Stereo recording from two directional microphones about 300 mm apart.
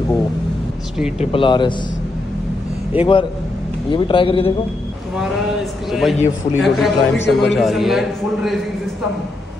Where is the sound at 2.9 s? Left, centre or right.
Centre.